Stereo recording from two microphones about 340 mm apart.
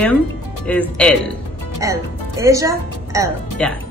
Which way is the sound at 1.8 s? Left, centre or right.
Centre.